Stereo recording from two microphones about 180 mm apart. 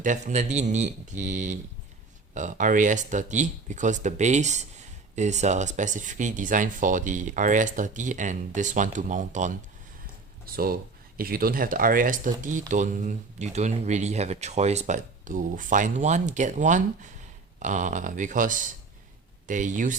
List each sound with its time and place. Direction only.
0.0 s speech: 45° right (ahead or behind)
10.4 s speech: 55° right (ahead or behind)